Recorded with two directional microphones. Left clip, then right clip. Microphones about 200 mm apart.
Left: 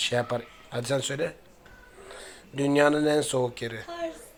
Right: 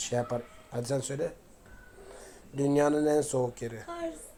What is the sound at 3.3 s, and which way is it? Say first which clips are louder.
Speech: left 3 dB; 25° left (ahead or behind).